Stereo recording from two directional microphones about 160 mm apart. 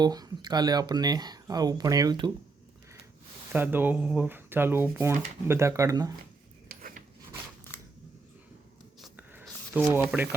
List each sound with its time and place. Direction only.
0.0 s speech: 25° right (ahead or behind)
3.5 s speech: 10° right (ahead or behind)
6.7 s rub: 60° right (ahead or behind)
9.0 s a sound: 5° right (ahead or behind)
9.9 s speech: 10° right (ahead or behind)